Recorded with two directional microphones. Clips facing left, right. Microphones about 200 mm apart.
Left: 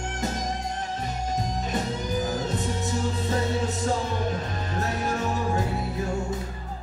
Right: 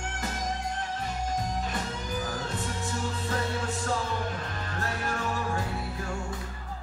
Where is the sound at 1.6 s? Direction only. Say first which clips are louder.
Left 5 dB; 20° left (ahead or behind).